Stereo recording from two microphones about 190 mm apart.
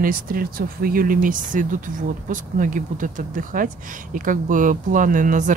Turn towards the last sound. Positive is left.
turn(degrees=-40)  # may be behind; listen again after turning